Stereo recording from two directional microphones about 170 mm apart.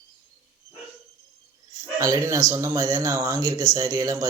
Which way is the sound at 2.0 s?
20° right (ahead or behind).